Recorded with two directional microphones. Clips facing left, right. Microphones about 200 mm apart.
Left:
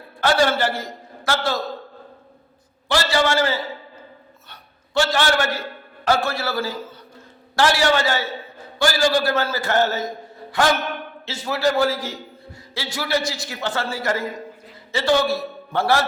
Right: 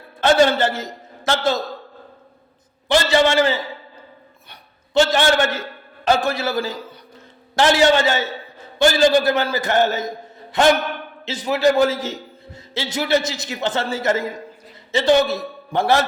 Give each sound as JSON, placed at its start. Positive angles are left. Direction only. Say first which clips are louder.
{"t": 0.2, "sound": "a man's voice", "louder": "right 4 dB", "side_deg": -20}
{"t": 2.9, "sound": "a man's voice", "louder": "right 4 dB", "side_deg": -20}
{"t": 4.9, "sound": "a man's voice", "louder": "right 4 dB", "side_deg": -20}